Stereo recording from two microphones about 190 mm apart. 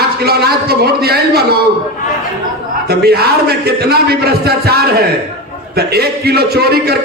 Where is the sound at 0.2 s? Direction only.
55° right (ahead or behind).